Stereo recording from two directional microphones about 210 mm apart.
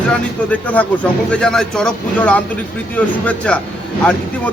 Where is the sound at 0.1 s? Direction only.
5° left (ahead or behind).